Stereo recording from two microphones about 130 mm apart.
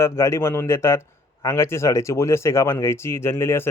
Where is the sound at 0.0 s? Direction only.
20° left (ahead or behind).